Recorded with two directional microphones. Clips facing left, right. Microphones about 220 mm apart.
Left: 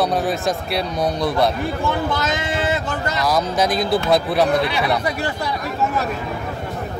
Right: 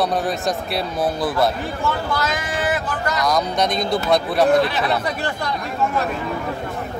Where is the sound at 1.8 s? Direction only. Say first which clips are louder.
Even; 20° left (ahead or behind).